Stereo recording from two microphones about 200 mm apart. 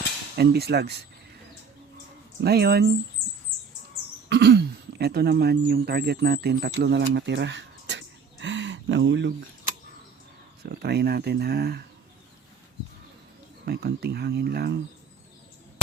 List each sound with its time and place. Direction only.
0.3 s speech: 55° right (ahead or behind)
2.4 s speech: 55° right (ahead or behind)
4.3 s speech: 55° right (ahead or behind)
10.7 s speech: 55° right (ahead or behind)
13.7 s speech: 50° right (ahead or behind)